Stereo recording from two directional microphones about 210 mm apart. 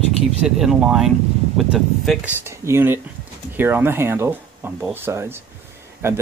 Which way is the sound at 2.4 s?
15° right (ahead or behind).